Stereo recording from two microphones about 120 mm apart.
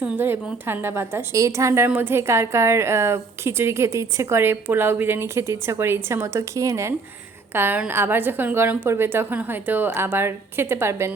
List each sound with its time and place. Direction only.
0.0 s a woman's voice: 15° right (ahead or behind)